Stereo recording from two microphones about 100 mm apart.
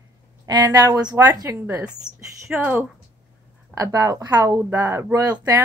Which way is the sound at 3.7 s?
35° right (ahead or behind).